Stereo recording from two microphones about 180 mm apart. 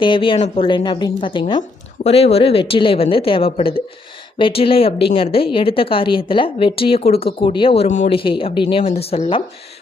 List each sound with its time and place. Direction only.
0.0 s a woman's voice: 30° left (ahead or behind)
8.2 s a woman's voice: 30° left (ahead or behind)